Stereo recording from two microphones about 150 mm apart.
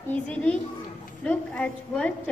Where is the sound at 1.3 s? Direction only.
5° left (ahead or behind).